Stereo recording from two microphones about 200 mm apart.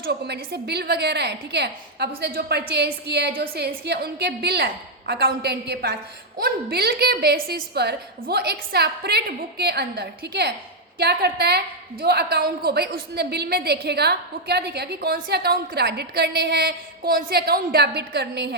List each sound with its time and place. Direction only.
0.0 s a woman's voice: 55° right (ahead or behind)